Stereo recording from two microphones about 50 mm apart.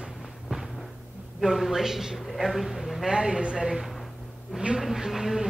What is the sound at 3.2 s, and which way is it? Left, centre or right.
Speech, centre.